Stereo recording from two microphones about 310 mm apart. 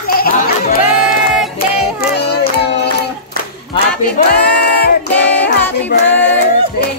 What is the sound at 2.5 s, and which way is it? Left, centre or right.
Child singing, left.